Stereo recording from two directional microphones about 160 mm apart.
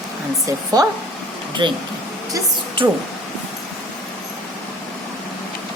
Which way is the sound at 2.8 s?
30° right (ahead or behind).